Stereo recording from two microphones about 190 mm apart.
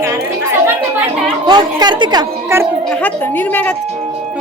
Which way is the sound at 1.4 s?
25° right (ahead or behind).